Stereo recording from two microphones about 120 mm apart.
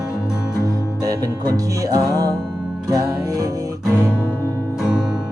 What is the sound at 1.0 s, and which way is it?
Music, 30° right (ahead or behind).